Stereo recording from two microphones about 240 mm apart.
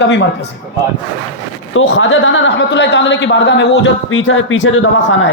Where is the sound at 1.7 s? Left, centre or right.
Left.